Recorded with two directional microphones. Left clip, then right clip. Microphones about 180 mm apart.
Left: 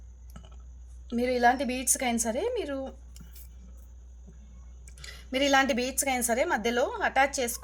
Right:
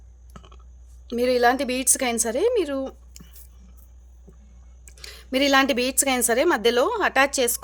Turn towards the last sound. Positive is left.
turn(degrees=-50)  # may be behind; listen again after turning